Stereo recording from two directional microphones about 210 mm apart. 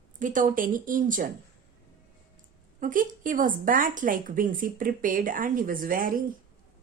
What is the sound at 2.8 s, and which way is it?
Speech, 40° right (ahead or behind).